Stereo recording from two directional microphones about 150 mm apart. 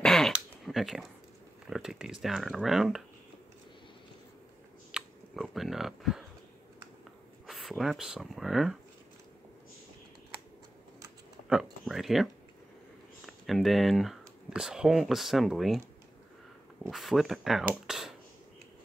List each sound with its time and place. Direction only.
0.0 s dog: 5° left (ahead or behind)
0.3 s a sound: centre (ahead or behind)
1.7 s speech: 5° right (ahead or behind)
4.9 s speech: centre (ahead or behind)
7.4 s speech: centre (ahead or behind)
11.4 s speech: 5° right (ahead or behind)
16.9 s speech: centre (ahead or behind)